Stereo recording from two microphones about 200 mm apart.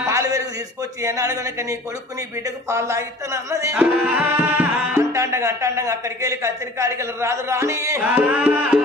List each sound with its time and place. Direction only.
0.1 s a sound: 15° right (ahead or behind)
1.0 s music: 15° right (ahead or behind)
2.6 s music: 15° right (ahead or behind)
3.8 s music: 5° right (ahead or behind)